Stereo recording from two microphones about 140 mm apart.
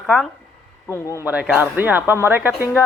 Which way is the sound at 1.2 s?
10° right (ahead or behind).